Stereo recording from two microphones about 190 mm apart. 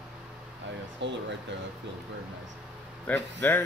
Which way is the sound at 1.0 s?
70° right (ahead or behind).